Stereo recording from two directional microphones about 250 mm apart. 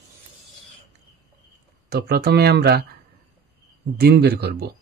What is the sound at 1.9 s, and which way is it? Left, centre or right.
Speech, right.